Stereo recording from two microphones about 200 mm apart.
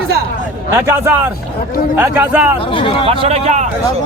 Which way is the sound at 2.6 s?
25° left (ahead or behind).